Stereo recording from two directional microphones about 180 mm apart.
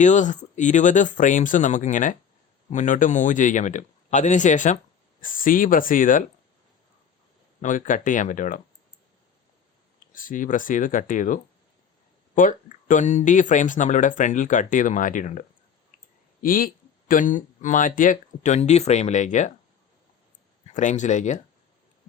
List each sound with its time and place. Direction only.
0.0 s speech: 45° left (ahead or behind)
7.6 s speech: 45° left (ahead or behind)
10.1 s speech: 50° left (ahead or behind)
20.7 s speech: 40° left (ahead or behind)